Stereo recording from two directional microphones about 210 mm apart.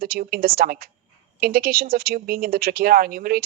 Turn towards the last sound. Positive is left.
turn(degrees=-45)  # may be behind; listen again after turning